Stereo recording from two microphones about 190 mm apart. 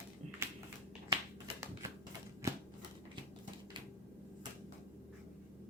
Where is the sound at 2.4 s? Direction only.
15° right (ahead or behind).